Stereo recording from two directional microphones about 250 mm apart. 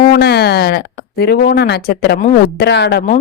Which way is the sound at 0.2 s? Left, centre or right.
Left.